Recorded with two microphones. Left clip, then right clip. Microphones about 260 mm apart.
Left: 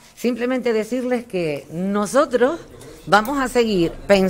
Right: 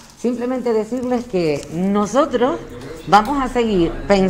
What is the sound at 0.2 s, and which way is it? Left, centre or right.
A woman's voice, left.